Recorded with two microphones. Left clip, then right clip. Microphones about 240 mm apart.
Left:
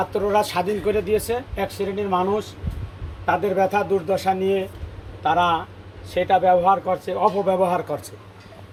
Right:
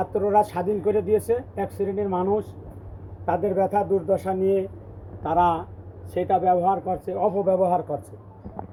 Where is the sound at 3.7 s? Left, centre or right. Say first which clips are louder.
Left 1 dB; right.